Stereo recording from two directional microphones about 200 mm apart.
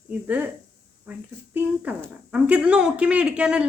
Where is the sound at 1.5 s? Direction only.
10° right (ahead or behind).